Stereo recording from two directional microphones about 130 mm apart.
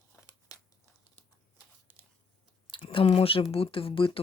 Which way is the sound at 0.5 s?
25° left (ahead or behind).